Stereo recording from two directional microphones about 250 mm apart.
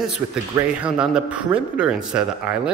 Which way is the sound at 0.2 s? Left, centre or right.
Centre.